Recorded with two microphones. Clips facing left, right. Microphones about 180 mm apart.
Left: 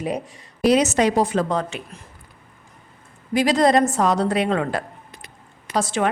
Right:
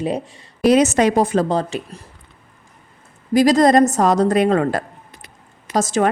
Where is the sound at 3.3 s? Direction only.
40° right (ahead or behind).